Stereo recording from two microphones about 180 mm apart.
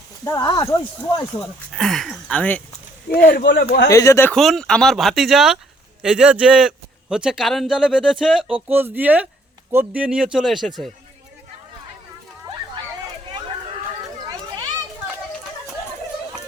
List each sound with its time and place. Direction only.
0.3 s speech: 20° left (ahead or behind)
1.7 s a man's voice: centre (ahead or behind)
3.2 s speech: 70° left (ahead or behind)
3.8 s speech: 15° left (ahead or behind)
4.4 s a man's voice: centre (ahead or behind)
14.3 s children playing: 20° right (ahead or behind)